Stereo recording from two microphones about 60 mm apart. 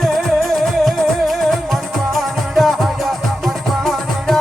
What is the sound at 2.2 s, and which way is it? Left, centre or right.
Music, centre.